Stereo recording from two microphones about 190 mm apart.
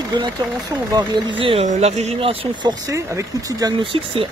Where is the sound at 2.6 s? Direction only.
20° right (ahead or behind).